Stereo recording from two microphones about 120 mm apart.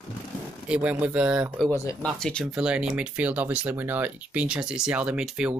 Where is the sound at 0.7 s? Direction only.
10° right (ahead or behind).